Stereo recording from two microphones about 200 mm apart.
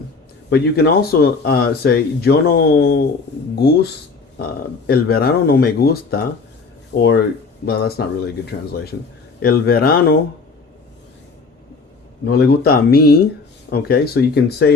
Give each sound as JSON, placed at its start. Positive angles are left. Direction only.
{"t": 0.5, "sound": "speech", "side_deg": 50}
{"t": 4.9, "sound": "speech", "side_deg": 50}
{"t": 12.2, "sound": "speech", "side_deg": 55}